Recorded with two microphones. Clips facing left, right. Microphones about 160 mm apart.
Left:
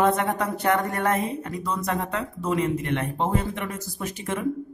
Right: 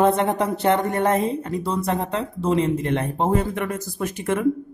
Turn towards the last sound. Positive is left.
turn(degrees=-55)  # may be behind; listen again after turning